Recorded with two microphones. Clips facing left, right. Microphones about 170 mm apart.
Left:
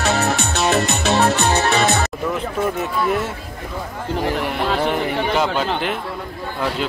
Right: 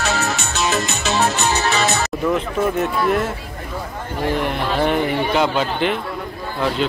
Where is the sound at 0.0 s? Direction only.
60° left (ahead or behind).